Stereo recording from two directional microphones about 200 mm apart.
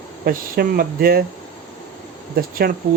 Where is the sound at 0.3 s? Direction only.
45° right (ahead or behind).